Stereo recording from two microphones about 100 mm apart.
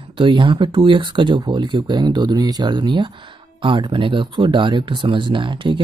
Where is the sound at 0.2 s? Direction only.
55° right (ahead or behind).